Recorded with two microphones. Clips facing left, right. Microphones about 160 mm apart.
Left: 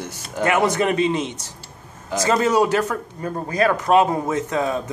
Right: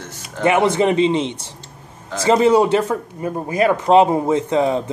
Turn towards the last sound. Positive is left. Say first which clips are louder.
# right 5 dB
turn(degrees=-20)  # may be behind; listen again after turning